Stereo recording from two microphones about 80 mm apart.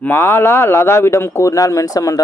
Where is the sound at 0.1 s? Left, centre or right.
Left.